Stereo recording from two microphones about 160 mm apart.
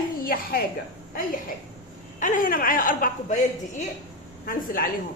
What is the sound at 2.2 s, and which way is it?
A woman's voice, 55° left (ahead or behind).